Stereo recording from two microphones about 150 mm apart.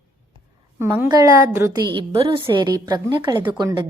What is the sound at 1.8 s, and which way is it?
A woman's voice, 35° right (ahead or behind).